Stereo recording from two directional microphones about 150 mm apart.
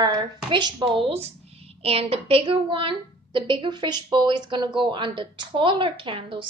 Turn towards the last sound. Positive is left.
turn(degrees=-35)  # may be behind; listen again after turning